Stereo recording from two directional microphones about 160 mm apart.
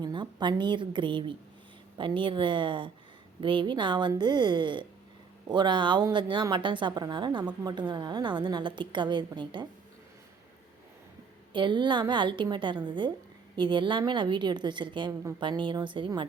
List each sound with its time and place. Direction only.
0.0 s a woman's voice: 25° right (ahead or behind)
11.5 s a woman's voice: 30° right (ahead or behind)